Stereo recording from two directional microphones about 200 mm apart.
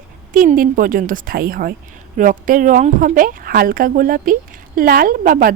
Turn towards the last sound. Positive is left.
turn(degrees=-45)  # may be behind; listen again after turning